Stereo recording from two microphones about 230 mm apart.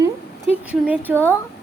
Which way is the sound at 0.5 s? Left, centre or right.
Centre.